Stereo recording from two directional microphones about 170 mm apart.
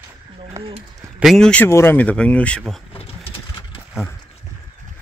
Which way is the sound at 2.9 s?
35° left (ahead or behind).